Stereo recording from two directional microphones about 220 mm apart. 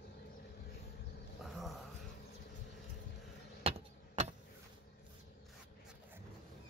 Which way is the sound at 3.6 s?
30° right (ahead or behind).